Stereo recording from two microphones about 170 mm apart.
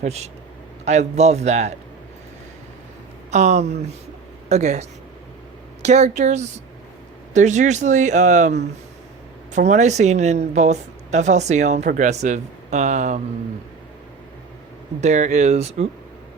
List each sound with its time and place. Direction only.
0.0 s a man's voice: 40° right (ahead or behind)
3.3 s speech: 45° right (ahead or behind)
15.0 s speech: 45° right (ahead or behind)